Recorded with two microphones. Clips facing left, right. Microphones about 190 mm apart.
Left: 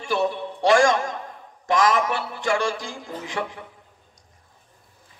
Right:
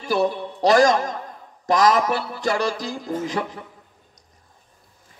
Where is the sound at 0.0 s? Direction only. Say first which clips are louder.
Right 2 dB; 35° right (ahead or behind).